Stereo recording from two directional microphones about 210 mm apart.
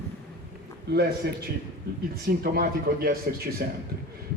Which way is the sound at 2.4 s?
45° right (ahead or behind).